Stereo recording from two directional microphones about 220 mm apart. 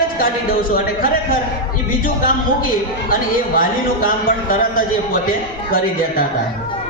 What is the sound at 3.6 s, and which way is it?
A woman's voice, 40° left (ahead or behind).